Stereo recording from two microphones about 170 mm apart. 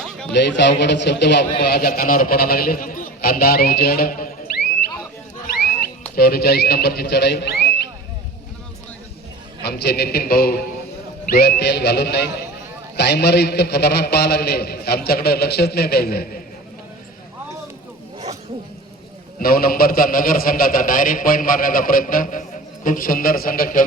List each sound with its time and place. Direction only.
0.0 s a sound: 5° left (ahead or behind)
0.3 s a man's voice: 90° left; by 4.6 s 60° left (ahead or behind)
6.1 s a man's voice: 65° left (ahead or behind)
9.6 s a man's voice: 70° left (ahead or behind)
19.4 s a man's voice: 60° left (ahead or behind)